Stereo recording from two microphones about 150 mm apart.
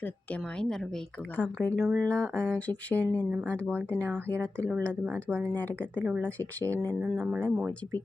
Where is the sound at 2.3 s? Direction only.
15° right (ahead or behind).